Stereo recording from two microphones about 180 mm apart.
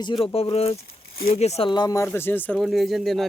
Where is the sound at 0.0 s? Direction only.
25° left (ahead or behind).